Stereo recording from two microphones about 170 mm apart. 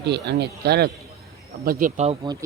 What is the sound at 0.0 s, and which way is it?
Speech, 80° right.